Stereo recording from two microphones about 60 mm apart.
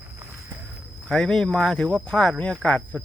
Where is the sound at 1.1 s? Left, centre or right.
Centre.